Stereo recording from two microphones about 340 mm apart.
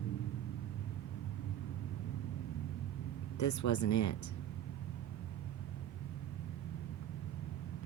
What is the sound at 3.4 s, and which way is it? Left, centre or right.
Speech, left.